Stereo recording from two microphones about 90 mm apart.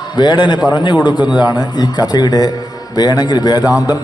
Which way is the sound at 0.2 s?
55° left (ahead or behind).